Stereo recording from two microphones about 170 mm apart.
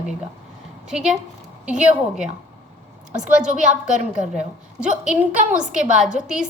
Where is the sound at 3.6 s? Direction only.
45° right (ahead or behind).